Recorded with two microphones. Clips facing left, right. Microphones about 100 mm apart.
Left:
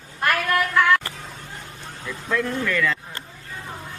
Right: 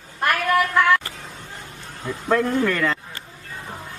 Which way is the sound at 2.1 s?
40° right (ahead or behind).